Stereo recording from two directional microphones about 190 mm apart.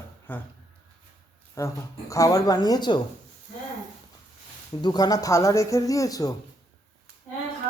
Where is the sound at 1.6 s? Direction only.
15° left (ahead or behind).